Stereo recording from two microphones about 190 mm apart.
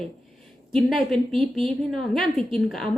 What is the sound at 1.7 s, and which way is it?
A woman's voice, centre (ahead or behind).